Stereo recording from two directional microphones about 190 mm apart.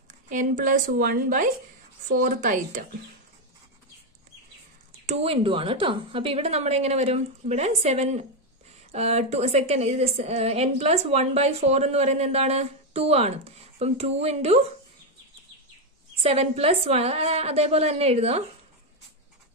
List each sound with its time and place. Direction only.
0.1 s speech: 45° right (ahead or behind)
5.0 s a woman's voice: 35° right (ahead or behind)
16.2 s a woman's voice: 30° right (ahead or behind)